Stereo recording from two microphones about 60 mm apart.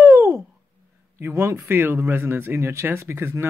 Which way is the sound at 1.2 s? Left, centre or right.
Right.